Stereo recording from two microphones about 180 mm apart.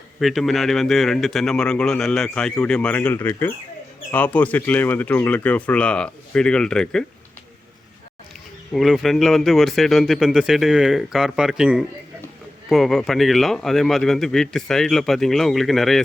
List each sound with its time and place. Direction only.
0.2 s speech: centre (ahead or behind)
8.7 s speech: centre (ahead or behind)